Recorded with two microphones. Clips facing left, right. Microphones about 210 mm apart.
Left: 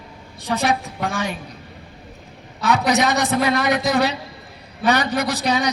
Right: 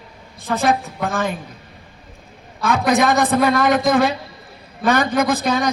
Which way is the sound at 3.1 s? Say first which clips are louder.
Right 3 dB; 50° right (ahead or behind).